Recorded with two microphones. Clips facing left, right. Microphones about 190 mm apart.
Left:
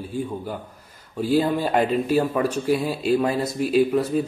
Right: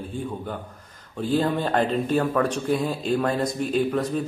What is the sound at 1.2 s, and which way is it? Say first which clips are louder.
A man's voice: left 2 dB; 10° left (ahead or behind).